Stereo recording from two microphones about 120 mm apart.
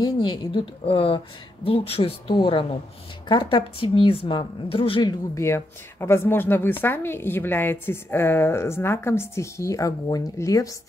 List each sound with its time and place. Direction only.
0.0 s a woman's voice: 40° left (ahead or behind)
5.3 s a woman's voice: 20° left (ahead or behind)